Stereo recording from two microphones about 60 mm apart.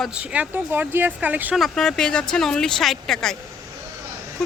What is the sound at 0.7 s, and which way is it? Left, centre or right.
Speech, right.